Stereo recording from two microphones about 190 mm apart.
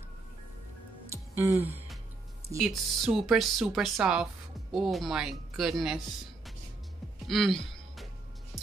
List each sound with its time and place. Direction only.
1.0 s music: 15° right (ahead or behind)
2.6 s speech: centre (ahead or behind)
7.2 s music: centre (ahead or behind)